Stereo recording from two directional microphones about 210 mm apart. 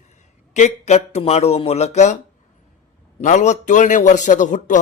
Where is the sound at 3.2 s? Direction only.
35° left (ahead or behind).